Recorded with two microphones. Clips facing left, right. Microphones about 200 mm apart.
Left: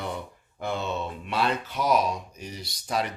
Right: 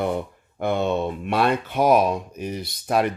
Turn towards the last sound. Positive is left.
turn(degrees=-55)  # may be behind; listen again after turning